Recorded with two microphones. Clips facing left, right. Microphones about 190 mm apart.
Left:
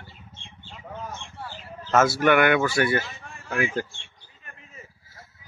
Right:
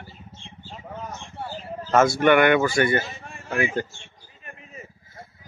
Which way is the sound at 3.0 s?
25° right (ahead or behind).